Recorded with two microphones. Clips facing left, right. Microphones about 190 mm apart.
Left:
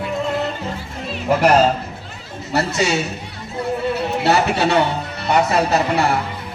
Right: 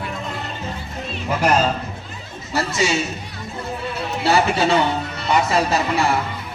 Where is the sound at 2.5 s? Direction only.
60° left (ahead or behind).